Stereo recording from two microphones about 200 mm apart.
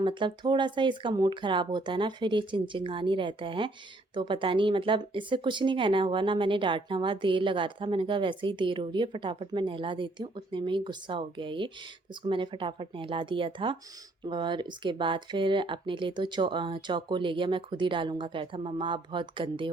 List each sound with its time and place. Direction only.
0.0 s speech: 25° right (ahead or behind)